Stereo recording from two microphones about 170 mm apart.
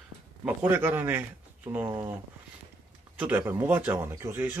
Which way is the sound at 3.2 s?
10° right (ahead or behind).